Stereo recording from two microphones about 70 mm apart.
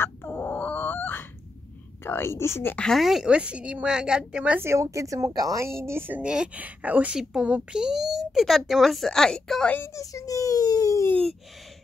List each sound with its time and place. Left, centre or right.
0.0 s wail: left
2.0 s a woman's voice: left
2.9 s speech: centre
3.3 s a woman's voice: centre
4.6 s speech: right
5.6 s speech: right
6.2 s speech: centre
9.8 s a child's voice: left